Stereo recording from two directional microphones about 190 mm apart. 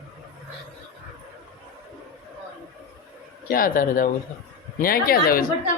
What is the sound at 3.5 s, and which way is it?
A man's voice, 50° left (ahead or behind).